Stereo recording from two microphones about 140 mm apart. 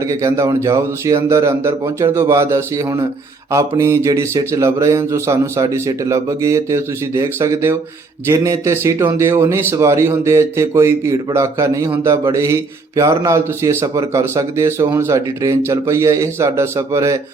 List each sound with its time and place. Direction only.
0.1 s speech: 20° right (ahead or behind)